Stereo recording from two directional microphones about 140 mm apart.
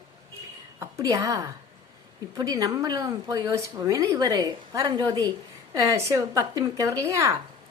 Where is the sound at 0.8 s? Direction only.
20° right (ahead or behind).